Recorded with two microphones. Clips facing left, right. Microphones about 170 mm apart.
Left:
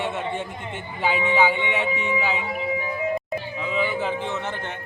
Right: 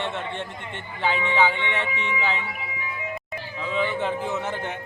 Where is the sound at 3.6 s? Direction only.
5° left (ahead or behind).